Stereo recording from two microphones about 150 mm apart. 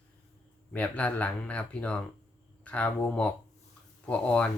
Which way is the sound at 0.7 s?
10° left (ahead or behind).